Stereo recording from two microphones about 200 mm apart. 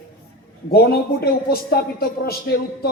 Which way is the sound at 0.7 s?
50° left (ahead or behind).